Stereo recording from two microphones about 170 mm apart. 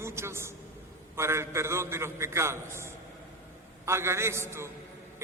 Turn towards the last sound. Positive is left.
turn(degrees=-15)  # may be behind; listen again after turning